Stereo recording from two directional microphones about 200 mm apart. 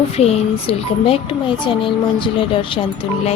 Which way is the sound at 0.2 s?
30° left (ahead or behind).